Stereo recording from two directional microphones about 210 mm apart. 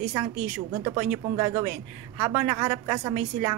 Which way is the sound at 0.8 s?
20° right (ahead or behind).